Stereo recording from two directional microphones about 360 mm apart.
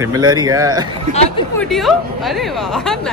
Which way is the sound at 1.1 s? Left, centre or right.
Centre.